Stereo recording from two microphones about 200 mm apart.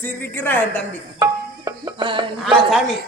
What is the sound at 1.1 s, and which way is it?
Tabla, 20° right (ahead or behind).